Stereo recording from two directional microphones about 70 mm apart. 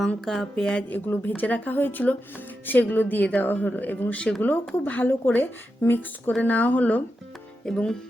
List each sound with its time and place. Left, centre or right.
0.3 s speech: centre
0.9 s speech: left
7.6 s speech: centre